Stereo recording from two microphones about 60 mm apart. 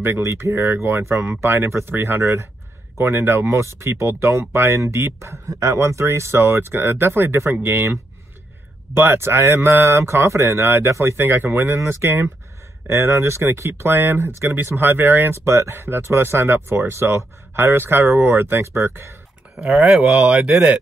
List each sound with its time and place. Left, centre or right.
0.2 s speech: right
17.6 s speech: right
20.0 s speech: right
20.3 s speech: centre